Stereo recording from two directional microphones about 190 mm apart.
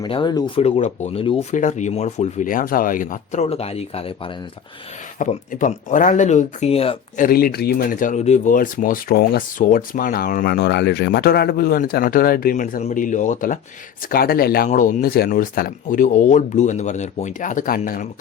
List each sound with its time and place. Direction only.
0.0 s speech: 25° left (ahead or behind)
5.2 s speech: 40° left (ahead or behind)
7.2 s speech: 50° left (ahead or behind)